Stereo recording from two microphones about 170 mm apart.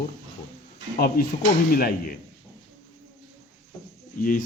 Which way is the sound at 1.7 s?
60° left (ahead or behind).